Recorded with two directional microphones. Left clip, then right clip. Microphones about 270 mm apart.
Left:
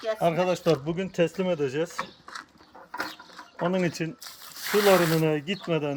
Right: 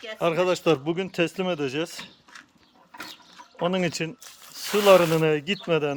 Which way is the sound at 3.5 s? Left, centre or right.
Centre.